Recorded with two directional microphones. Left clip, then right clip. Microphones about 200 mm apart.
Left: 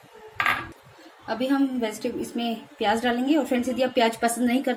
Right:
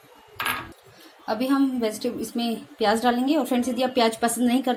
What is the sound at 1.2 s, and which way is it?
A woman's voice, 35° right (ahead or behind).